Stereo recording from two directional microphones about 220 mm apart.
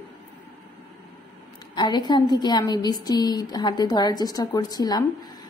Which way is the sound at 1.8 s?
20° left (ahead or behind).